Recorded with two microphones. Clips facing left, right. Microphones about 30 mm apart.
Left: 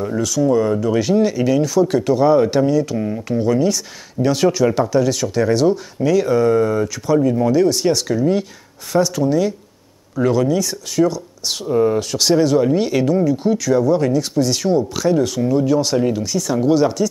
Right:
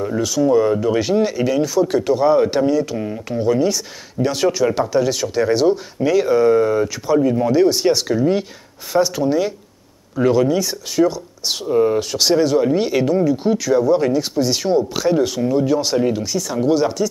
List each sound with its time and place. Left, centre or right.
0.0 s speech: centre